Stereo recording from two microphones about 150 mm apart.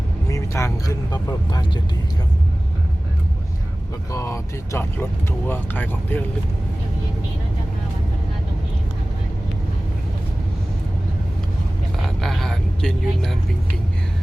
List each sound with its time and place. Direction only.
0.3 s speech: 20° left (ahead or behind)
4.1 s speech: 20° left (ahead or behind)
12.0 s speech: centre (ahead or behind)